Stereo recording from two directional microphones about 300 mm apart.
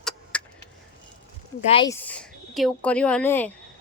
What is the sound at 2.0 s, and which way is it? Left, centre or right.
Speech, centre.